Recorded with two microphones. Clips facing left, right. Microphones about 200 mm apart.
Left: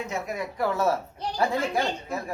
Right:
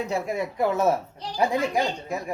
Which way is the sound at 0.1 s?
25° right (ahead or behind).